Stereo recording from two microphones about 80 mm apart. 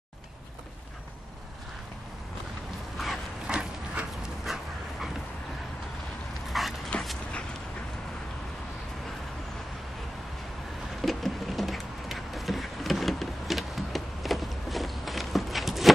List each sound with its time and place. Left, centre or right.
3.0 s dog: centre
6.5 s dog: centre
6.9 s dog: centre
11.0 s a sound: centre